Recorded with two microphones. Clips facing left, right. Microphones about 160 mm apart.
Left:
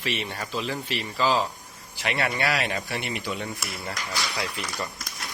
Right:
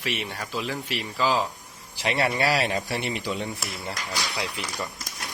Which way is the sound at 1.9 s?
30° right (ahead or behind).